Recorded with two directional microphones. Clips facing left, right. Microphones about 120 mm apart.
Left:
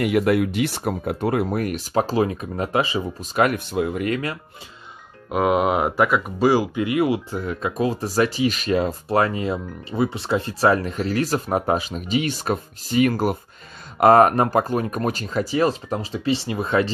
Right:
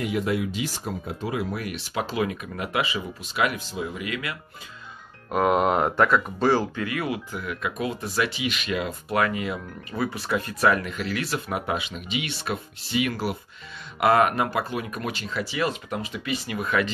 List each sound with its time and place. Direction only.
0.0 s speech: 65° left (ahead or behind); by 4.4 s 40° left (ahead or behind)
5.3 s speech: 5° left (ahead or behind); by 16.9 s 30° left (ahead or behind)